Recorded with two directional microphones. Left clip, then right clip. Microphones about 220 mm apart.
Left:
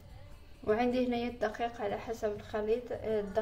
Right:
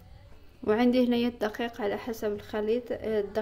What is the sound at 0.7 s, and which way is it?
Speech, 40° right (ahead or behind).